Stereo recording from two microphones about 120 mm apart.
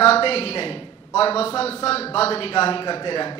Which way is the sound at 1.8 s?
55° left (ahead or behind).